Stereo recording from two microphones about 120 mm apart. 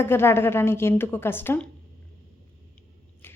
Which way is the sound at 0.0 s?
20° left (ahead or behind).